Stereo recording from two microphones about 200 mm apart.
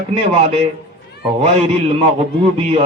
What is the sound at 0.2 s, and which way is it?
A man's voice, 30° right (ahead or behind).